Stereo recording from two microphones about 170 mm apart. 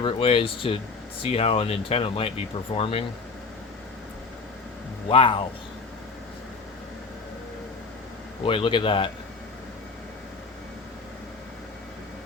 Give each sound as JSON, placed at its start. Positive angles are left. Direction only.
{"t": 0.0, "sound": "speech", "side_deg": 30}
{"t": 5.0, "sound": "speech", "side_deg": 30}
{"t": 8.4, "sound": "speech", "side_deg": 30}